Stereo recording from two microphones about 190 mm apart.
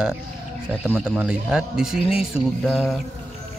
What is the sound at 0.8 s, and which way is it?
A man's voice, 5° right (ahead or behind).